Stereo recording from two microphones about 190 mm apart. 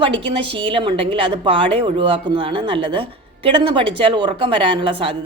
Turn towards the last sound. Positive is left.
turn(degrees=-30)  # may be behind; listen again after turning